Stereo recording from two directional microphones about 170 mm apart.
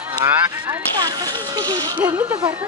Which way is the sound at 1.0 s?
25° right (ahead or behind).